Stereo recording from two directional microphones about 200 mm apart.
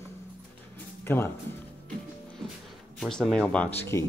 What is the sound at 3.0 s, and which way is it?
Speech, centre (ahead or behind).